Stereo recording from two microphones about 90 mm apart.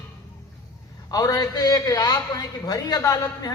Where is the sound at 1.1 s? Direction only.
45° left (ahead or behind).